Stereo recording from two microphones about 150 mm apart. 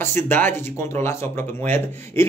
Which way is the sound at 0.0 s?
15° left (ahead or behind).